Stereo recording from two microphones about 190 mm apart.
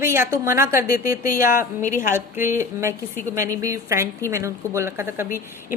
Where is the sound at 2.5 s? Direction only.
15° right (ahead or behind).